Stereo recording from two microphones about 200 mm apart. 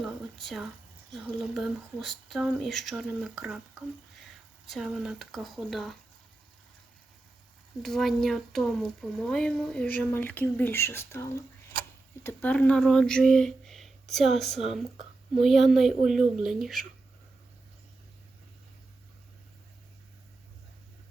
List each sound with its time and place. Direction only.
0.0 s a sound: centre (ahead or behind)
1.1 s speech: centre (ahead or behind)
7.8 s speech: centre (ahead or behind)